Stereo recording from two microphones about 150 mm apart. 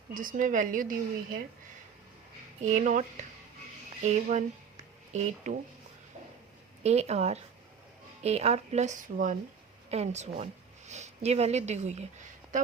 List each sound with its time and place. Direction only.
0.1 s a woman's voice: 65° right (ahead or behind)
2.6 s speech: 55° right (ahead or behind)
6.8 s speech: 45° right (ahead or behind)
9.9 s a woman's voice: 45° right (ahead or behind)